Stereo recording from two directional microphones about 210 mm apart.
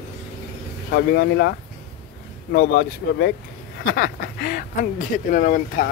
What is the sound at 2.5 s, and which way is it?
Speech, 50° left (ahead or behind).